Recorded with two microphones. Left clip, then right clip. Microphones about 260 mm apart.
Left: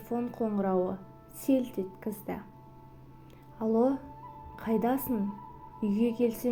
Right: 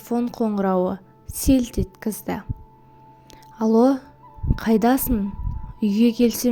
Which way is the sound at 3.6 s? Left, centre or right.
Right.